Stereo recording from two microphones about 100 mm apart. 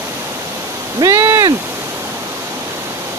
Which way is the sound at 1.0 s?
30° right (ahead or behind).